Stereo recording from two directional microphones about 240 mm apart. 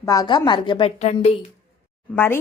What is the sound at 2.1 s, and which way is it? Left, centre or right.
Speech, centre.